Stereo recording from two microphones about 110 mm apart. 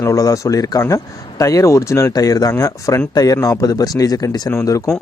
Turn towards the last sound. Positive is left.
turn(degrees=30)  # may be behind; listen again after turning